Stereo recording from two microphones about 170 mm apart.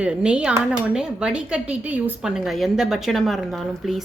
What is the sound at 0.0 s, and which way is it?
Speech, 5° right (ahead or behind).